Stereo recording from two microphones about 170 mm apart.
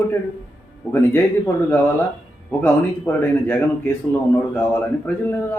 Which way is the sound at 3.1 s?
10° left (ahead or behind).